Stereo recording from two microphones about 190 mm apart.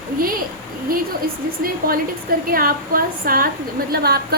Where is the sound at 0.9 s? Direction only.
50° right (ahead or behind).